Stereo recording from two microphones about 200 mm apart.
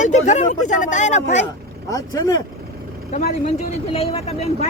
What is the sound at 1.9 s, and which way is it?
Speech, 15° left (ahead or behind).